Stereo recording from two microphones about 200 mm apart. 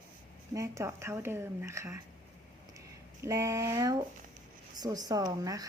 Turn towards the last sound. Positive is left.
turn(degrees=-20)  # may be behind; listen again after turning